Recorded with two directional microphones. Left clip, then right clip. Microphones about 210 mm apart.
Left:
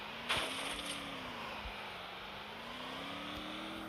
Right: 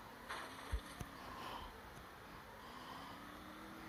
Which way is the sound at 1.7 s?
45° left (ahead or behind).